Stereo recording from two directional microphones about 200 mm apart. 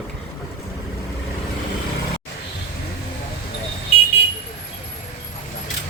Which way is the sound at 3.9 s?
30° left (ahead or behind).